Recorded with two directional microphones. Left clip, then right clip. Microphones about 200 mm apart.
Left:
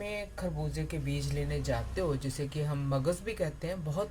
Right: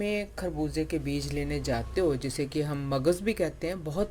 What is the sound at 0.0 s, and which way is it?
Speech, 50° right (ahead or behind).